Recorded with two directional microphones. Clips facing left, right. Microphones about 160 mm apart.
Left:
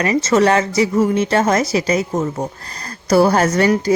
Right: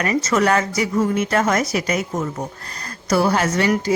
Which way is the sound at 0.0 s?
25° left (ahead or behind).